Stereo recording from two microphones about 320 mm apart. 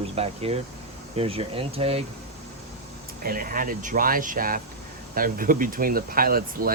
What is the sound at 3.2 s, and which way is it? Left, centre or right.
Speech, right.